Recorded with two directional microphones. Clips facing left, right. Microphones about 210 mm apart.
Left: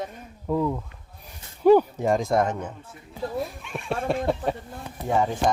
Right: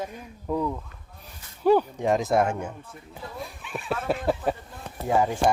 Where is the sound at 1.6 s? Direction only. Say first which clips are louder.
Left 4 dB; 15° left (ahead or behind).